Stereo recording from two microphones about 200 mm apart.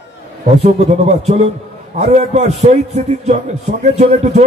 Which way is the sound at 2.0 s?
35° right (ahead or behind).